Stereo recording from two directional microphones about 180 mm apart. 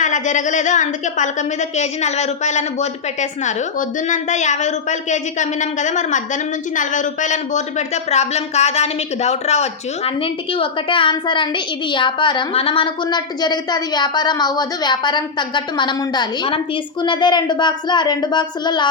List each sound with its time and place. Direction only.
0.0 s a woman's voice: 45° left (ahead or behind); by 18.9 s 25° left (ahead or behind)